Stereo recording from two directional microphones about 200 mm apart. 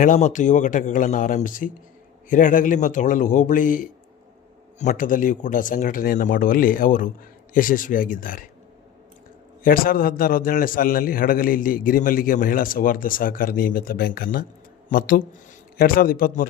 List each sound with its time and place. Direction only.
0.0 s a man's voice: 35° left (ahead or behind)
9.6 s a man's voice: 45° left (ahead or behind)